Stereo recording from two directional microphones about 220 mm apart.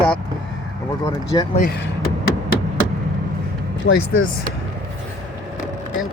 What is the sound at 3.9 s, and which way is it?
Speech, 50° left (ahead or behind).